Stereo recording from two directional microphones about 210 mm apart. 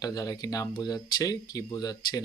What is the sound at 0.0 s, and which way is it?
Speech, 15° left (ahead or behind).